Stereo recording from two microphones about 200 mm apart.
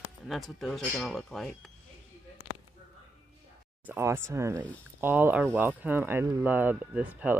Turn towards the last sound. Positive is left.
turn(degrees=-10)  # may be behind; listen again after turning